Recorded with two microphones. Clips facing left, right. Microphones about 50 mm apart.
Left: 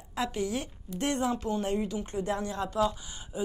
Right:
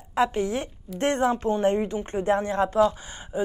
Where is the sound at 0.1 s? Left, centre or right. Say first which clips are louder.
Right 7 dB; right.